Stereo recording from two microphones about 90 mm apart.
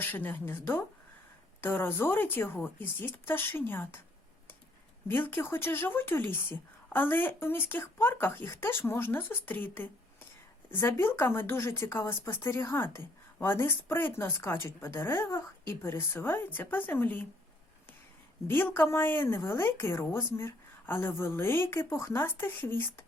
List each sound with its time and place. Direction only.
0.0 s speech: 20° left (ahead or behind)
5.0 s speech: 25° left (ahead or behind)
18.4 s speech: 25° left (ahead or behind)